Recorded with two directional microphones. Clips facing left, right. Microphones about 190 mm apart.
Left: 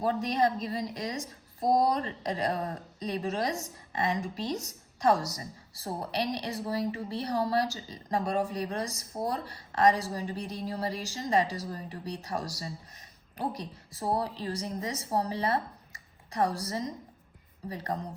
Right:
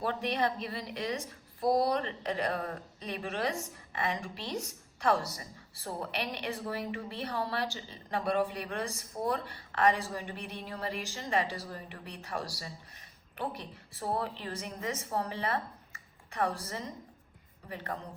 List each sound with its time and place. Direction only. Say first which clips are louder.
0.0 s a woman's voice: left 4 dB; 40° left (ahead or behind)